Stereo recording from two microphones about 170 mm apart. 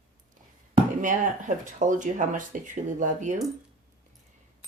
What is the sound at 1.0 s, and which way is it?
Speech, 50° right (ahead or behind).